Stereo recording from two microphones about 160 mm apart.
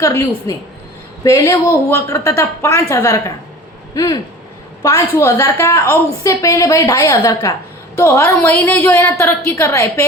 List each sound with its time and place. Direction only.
0.0 s a woman's voice: 20° left (ahead or behind)